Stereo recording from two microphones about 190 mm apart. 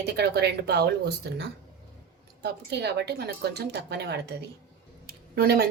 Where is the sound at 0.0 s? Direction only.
60° right (ahead or behind).